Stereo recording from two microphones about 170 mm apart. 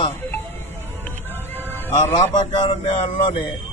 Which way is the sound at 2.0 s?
45° left (ahead or behind).